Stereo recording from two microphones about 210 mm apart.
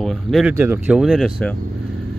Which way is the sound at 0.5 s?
10° right (ahead or behind).